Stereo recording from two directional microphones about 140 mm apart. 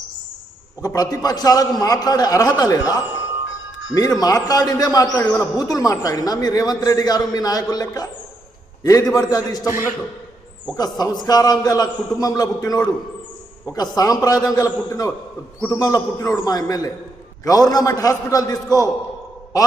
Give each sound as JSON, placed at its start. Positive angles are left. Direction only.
{"t": 0.8, "sound": "a man's voice", "side_deg": 25}
{"t": 3.9, "sound": "a man's voice", "side_deg": 25}
{"t": 10.8, "sound": "a man's voice", "side_deg": 30}